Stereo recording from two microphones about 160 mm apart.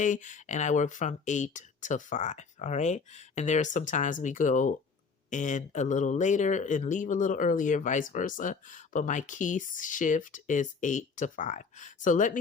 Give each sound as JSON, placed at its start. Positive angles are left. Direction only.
{"t": 0.0, "sound": "speech", "side_deg": 50}